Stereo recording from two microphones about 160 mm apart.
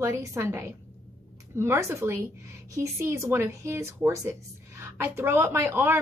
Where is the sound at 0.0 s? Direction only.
20° right (ahead or behind).